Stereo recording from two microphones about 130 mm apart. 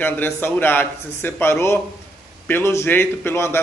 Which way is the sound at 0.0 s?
15° left (ahead or behind).